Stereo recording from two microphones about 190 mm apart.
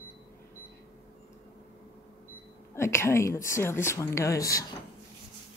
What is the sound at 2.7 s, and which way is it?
A woman's voice, 15° left (ahead or behind).